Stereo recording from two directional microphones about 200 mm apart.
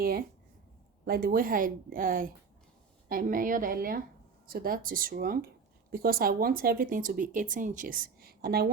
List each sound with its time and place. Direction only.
0.0 s speech: 50° right (ahead or behind)